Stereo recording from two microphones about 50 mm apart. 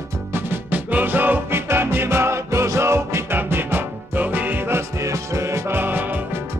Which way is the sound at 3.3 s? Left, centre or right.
Right.